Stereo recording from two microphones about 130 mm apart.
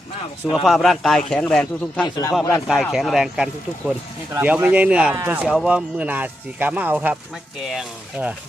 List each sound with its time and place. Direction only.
0.6 s speech: centre (ahead or behind)
2.0 s speech: 30° left (ahead or behind)
2.6 s speech: 5° right (ahead or behind)